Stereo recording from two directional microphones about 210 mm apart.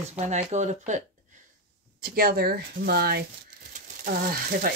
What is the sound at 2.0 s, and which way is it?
Speech, 45° right (ahead or behind).